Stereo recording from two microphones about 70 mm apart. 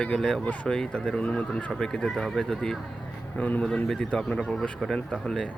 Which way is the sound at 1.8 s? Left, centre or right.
Centre.